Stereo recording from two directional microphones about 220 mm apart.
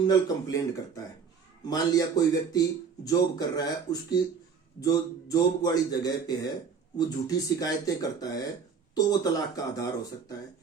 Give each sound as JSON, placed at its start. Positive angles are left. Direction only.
{"t": 0.0, "sound": "a man's voice", "side_deg": 20}